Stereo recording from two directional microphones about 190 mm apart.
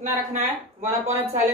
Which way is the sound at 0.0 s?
35° right (ahead or behind).